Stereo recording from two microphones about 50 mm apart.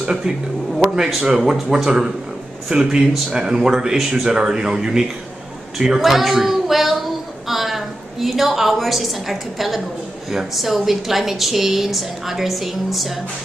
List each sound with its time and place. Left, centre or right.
0.0 s speech: centre
5.9 s a sound: centre
10.3 s a woman's voice: centre